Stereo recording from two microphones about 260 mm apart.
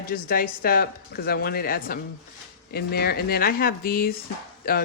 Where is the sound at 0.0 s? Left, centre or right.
Left.